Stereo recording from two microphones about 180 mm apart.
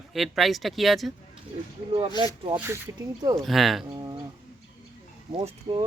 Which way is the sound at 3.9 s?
20° right (ahead or behind).